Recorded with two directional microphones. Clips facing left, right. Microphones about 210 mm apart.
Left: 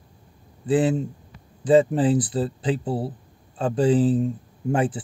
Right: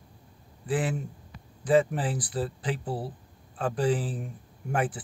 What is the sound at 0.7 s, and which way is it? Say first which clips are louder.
Speech: left 9 dB; 25° left (ahead or behind).